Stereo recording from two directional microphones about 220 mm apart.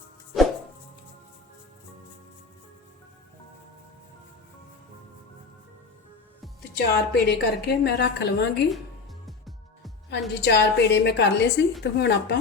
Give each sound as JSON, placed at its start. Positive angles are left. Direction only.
{"t": 6.7, "sound": "a woman's voice", "side_deg": 45}
{"t": 10.1, "sound": "a woman's voice", "side_deg": 50}